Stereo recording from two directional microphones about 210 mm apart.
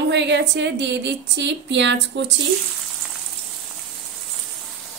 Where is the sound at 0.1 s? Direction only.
55° right (ahead or behind).